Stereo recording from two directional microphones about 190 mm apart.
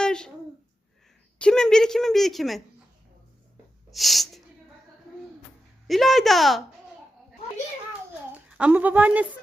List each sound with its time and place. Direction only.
0.0 s a sound: 5° left (ahead or behind)
1.4 s a woman's voice: 5° left (ahead or behind)
3.9 s a woman's voice: centre (ahead or behind)
5.9 s a woman's voice: centre (ahead or behind)
8.4 s speech: 5° right (ahead or behind)